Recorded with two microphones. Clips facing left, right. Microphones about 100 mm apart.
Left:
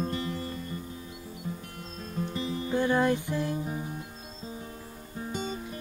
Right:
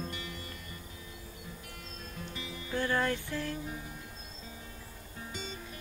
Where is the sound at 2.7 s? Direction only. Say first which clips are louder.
Left 6 dB; 15° left (ahead or behind).